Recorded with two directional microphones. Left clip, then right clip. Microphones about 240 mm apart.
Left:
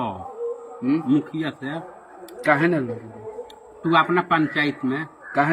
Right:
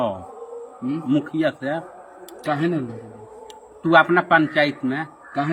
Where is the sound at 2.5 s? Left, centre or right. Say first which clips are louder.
Even; centre.